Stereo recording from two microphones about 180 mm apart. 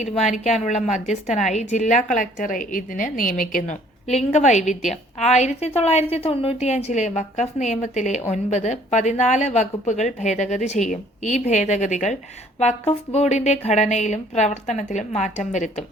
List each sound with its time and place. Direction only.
0.0 s a woman's voice: 40° left (ahead or behind)